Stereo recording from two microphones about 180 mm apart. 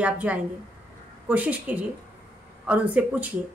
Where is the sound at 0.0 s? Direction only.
10° right (ahead or behind).